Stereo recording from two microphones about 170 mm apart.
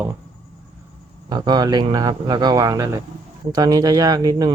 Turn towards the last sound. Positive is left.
turn(degrees=-20)  # may be behind; listen again after turning